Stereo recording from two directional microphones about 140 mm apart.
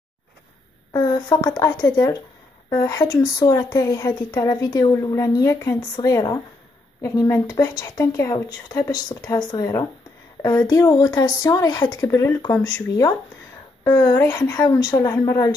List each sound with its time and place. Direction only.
0.9 s speech: 30° left (ahead or behind)